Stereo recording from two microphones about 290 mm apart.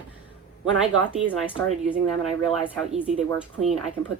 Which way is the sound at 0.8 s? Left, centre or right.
Right.